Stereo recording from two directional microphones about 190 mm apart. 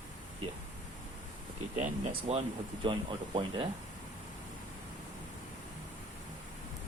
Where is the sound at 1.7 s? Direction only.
35° right (ahead or behind).